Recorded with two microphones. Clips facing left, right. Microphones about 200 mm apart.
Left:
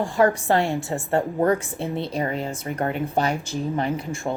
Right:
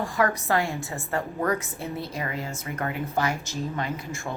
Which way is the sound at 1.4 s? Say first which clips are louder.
Left 6 dB; 30° left (ahead or behind).